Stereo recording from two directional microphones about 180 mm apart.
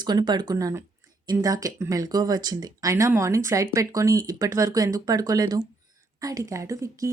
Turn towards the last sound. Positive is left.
turn(degrees=-15)  # may be behind; listen again after turning